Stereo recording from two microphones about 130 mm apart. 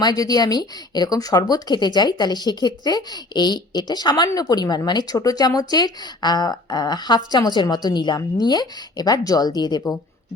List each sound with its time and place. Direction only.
0.0 s a woman's voice: 30° left (ahead or behind)